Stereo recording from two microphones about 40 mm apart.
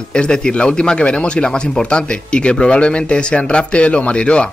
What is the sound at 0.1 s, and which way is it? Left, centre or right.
Speech, left.